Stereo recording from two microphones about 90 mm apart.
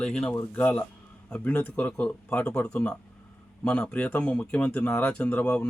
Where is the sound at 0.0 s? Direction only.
10° left (ahead or behind).